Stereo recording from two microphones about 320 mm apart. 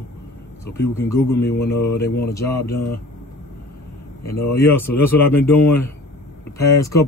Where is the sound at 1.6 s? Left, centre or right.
Left.